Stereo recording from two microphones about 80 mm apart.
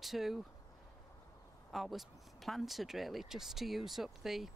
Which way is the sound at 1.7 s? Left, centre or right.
Centre.